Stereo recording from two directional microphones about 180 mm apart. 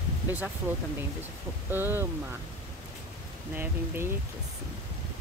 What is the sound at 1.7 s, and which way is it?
Speech, 10° right (ahead or behind).